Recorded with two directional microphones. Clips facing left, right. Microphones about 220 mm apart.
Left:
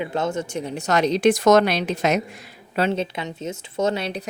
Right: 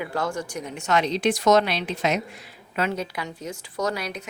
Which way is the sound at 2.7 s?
30° left (ahead or behind).